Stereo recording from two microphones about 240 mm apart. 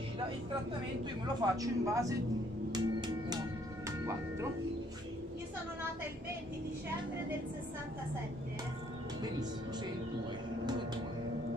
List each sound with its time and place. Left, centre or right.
1.2 s speech: centre
2.7 s music: centre
10.6 s music: centre